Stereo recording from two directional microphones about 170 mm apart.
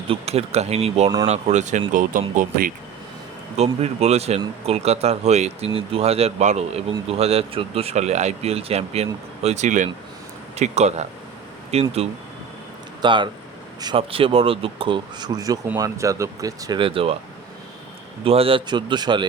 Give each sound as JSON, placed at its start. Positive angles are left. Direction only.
{"t": 0.1, "sound": "speech", "side_deg": -35}
{"t": 3.6, "sound": "speech", "side_deg": -40}
{"t": 18.3, "sound": "speech", "side_deg": -35}